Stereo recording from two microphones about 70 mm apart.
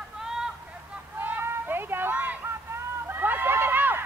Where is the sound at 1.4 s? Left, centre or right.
Right.